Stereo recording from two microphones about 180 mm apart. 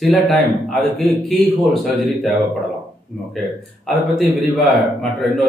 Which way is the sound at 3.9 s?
Centre (ahead or behind).